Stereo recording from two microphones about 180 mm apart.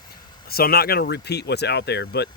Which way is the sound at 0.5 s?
60° left (ahead or behind).